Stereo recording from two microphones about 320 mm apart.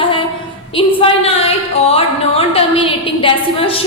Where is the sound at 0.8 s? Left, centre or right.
Centre.